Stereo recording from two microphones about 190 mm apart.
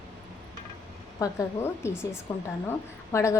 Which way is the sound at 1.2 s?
15° left (ahead or behind).